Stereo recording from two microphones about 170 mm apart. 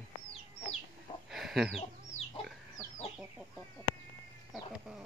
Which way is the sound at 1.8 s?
35° left (ahead or behind).